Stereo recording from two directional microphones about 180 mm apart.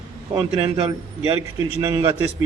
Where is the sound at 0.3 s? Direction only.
30° right (ahead or behind).